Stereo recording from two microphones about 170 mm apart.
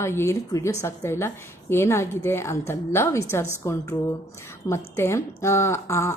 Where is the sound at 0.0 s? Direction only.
15° left (ahead or behind).